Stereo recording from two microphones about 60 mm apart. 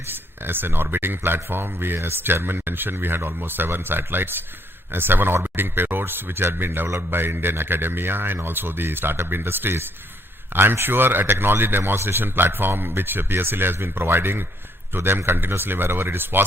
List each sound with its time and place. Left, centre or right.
0.1 s a man's voice: right